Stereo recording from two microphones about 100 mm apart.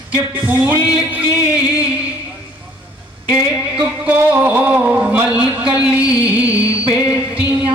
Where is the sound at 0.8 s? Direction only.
15° right (ahead or behind).